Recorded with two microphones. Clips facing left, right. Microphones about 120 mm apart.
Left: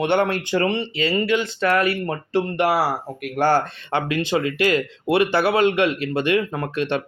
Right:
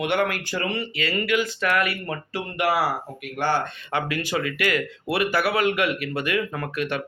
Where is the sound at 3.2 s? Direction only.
45° left (ahead or behind).